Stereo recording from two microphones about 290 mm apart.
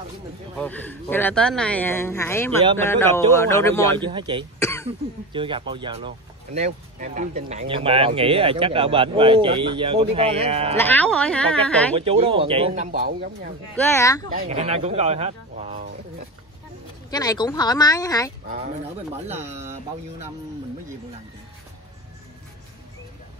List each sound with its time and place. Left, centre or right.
0.6 s speech: centre
4.0 s speech: centre
4.6 s cough: centre
4.8 s speech: centre
10.8 s speech: centre
12.0 s speech: centre
13.7 s speech: centre
14.3 s speech: right
17.1 s speech: centre